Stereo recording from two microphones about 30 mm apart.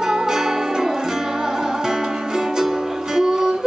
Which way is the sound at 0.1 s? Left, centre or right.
Centre.